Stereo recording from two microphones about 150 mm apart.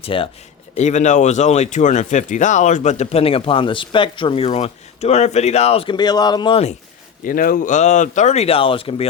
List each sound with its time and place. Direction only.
0.0 s speech: 35° left (ahead or behind)
0.8 s speech: 50° left (ahead or behind); by 6.6 s 30° left (ahead or behind)
7.3 s speech: 70° left (ahead or behind); by 9.0 s 35° left (ahead or behind)